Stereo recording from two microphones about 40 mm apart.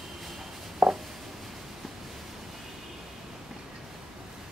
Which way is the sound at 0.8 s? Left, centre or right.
Right.